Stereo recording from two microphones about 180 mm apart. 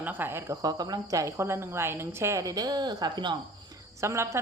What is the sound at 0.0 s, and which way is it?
A woman's voice, 10° right (ahead or behind).